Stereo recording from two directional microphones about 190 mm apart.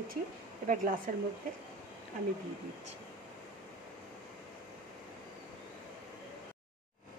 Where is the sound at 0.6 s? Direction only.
45° right (ahead or behind).